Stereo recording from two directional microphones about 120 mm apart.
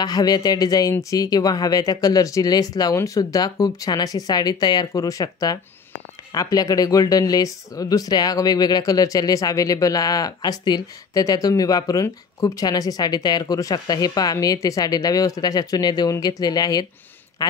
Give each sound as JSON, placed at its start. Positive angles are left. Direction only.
{"t": 0.0, "sound": "speech", "side_deg": 35}